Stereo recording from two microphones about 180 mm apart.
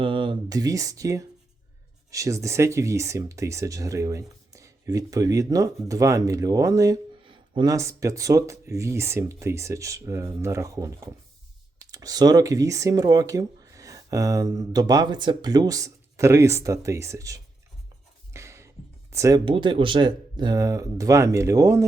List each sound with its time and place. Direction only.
0.0 s speech: 30° right (ahead or behind)
18.3 s a sound: 15° right (ahead or behind)
19.1 s speech: 15° right (ahead or behind)
19.5 s speech: 25° right (ahead or behind)